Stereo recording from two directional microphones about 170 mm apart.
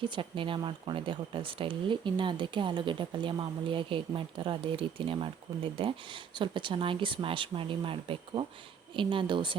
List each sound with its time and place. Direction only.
0.1 s speech: 30° right (ahead or behind)